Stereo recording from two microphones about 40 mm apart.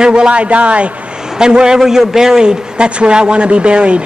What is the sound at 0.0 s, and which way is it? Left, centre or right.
Speech, right.